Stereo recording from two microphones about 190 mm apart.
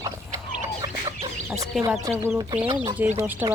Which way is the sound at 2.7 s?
15° right (ahead or behind).